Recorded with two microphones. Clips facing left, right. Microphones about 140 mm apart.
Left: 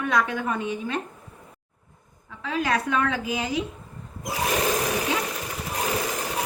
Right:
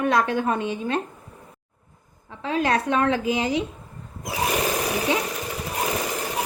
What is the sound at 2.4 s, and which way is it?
Speech, 30° right (ahead or behind).